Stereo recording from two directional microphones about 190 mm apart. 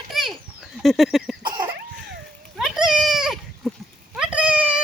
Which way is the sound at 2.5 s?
5° right (ahead or behind).